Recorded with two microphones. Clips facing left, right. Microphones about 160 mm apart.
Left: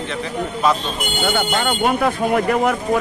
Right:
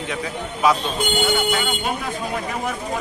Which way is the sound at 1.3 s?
60° left (ahead or behind).